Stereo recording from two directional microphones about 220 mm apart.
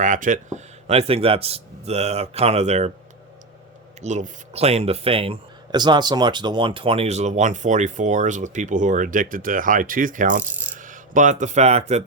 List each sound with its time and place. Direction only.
0.0 s speech: 35° right (ahead or behind)
4.0 s speech: 30° right (ahead or behind)